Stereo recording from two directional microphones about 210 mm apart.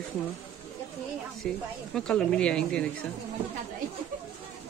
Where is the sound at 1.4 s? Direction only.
5° left (ahead or behind).